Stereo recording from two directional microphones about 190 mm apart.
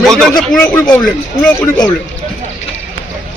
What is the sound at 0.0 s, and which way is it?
Speech, centre (ahead or behind).